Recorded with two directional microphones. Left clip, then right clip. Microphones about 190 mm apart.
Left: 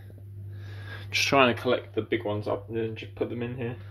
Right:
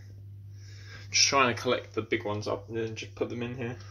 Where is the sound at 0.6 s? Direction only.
35° left (ahead or behind).